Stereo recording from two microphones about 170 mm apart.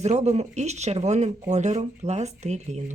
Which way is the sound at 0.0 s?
40° right (ahead or behind).